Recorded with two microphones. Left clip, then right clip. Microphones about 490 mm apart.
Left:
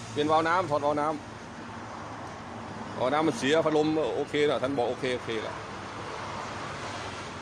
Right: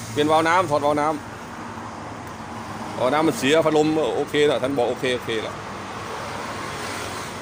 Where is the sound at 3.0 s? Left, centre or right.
Left.